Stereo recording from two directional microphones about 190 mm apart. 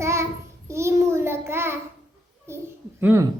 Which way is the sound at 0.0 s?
15° right (ahead or behind).